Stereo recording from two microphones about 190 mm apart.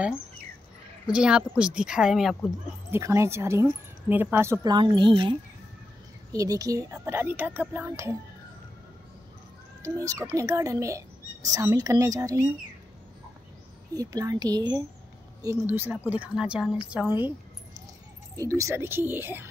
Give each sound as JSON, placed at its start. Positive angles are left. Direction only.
{"t": 1.1, "sound": "a woman's voice", "side_deg": -5}
{"t": 2.9, "sound": "speech", "side_deg": -15}
{"t": 9.8, "sound": "speech", "side_deg": -15}
{"t": 13.9, "sound": "a woman's voice", "side_deg": -20}
{"t": 18.6, "sound": "speech", "side_deg": -15}